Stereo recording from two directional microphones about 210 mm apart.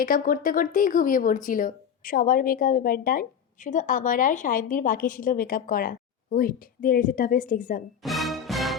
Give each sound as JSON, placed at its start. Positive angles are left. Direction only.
{"t": 0.0, "sound": "speech", "side_deg": 40}
{"t": 8.0, "sound": "music", "side_deg": 0}